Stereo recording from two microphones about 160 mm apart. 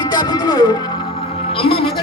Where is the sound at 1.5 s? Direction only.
35° left (ahead or behind).